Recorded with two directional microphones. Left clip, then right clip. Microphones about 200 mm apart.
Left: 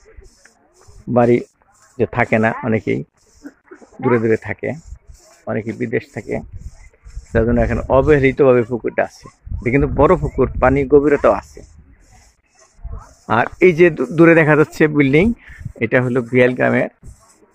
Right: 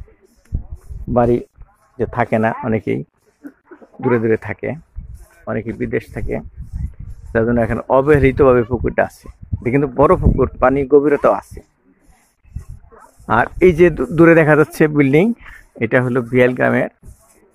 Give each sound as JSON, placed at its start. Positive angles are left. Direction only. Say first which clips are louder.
{"t": 1.1, "sound": "speech", "louder": "left 1 dB", "side_deg": 10}
{"t": 3.4, "sound": "a sound", "louder": "right 1 dB", "side_deg": -60}
{"t": 4.0, "sound": "speech", "louder": "even", "side_deg": 0}
{"t": 13.2, "sound": "speech", "louder": "right 1 dB", "side_deg": -5}